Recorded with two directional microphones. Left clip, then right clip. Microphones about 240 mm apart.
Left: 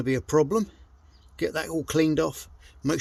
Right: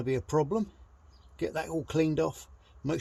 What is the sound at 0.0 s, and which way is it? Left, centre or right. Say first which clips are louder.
A man's voice: left 6 dB; left.